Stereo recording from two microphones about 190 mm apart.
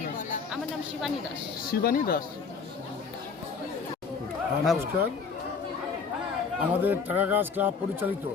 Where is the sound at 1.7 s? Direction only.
50° left (ahead or behind).